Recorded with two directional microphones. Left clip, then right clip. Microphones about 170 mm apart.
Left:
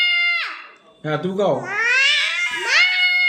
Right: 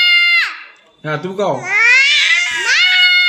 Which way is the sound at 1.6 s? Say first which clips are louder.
Right 7 dB; 10° right (ahead or behind).